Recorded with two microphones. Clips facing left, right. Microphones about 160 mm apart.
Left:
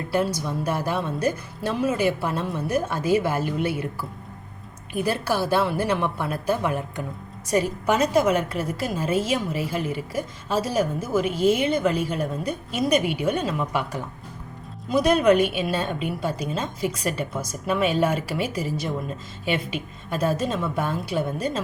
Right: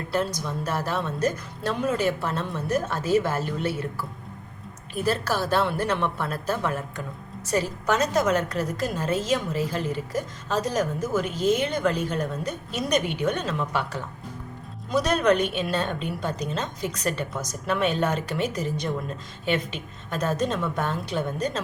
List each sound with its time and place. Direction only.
0.1 s a woman's voice: 10° left (ahead or behind)
4.9 s a woman's voice: 10° left (ahead or behind)